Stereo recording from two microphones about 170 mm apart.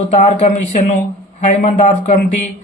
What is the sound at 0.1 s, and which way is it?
Speech, 45° left (ahead or behind).